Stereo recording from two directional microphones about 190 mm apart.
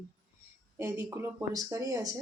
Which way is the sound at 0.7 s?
15° right (ahead or behind).